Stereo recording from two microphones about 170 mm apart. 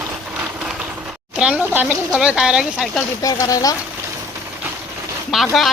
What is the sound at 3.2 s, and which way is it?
Speech, 20° left (ahead or behind).